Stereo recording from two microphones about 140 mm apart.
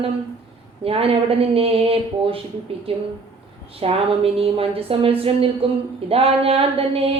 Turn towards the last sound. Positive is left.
turn(degrees=-40)  # may be behind; listen again after turning